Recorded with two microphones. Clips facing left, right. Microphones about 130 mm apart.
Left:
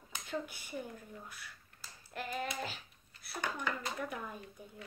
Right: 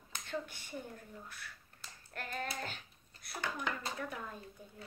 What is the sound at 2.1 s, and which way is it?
Speech, 5° left (ahead or behind).